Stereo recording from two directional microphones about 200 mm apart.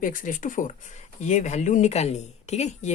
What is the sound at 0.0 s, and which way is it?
Speech, 40° left (ahead or behind).